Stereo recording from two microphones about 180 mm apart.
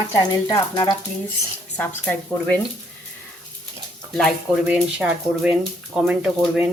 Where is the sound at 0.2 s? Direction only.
20° left (ahead or behind).